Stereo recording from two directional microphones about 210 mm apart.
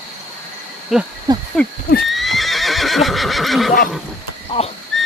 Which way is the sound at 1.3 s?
20° right (ahead or behind).